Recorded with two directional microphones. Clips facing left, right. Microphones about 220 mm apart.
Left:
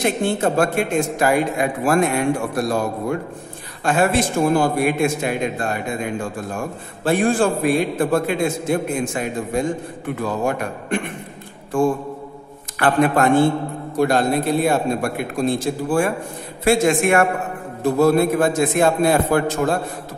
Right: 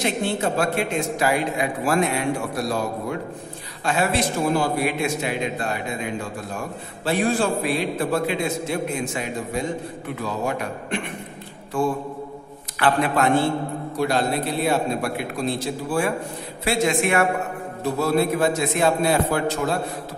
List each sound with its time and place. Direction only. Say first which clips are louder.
0.0 s a man's voice: left 4 dB; 50° left (ahead or behind)